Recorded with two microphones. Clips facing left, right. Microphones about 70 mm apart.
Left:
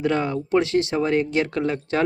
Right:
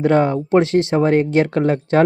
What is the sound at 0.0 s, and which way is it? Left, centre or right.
Speech, right.